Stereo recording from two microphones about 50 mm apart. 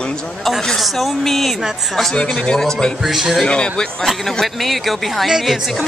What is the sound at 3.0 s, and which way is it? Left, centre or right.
Speech, centre.